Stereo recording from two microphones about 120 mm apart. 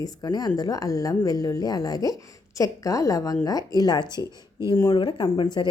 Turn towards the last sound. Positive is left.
turn(degrees=35)  # may be behind; listen again after turning